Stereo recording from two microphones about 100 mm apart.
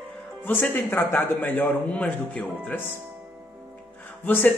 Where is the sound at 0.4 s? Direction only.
20° left (ahead or behind).